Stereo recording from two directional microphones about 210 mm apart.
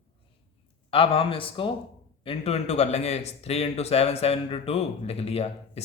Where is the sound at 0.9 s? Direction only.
25° left (ahead or behind).